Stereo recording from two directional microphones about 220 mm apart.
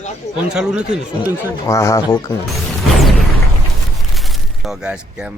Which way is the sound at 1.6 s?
15° left (ahead or behind).